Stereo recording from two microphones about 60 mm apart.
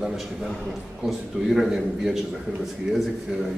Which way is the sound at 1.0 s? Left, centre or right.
Centre.